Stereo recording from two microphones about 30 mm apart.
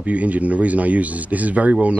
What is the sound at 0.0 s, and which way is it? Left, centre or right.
Speech, right.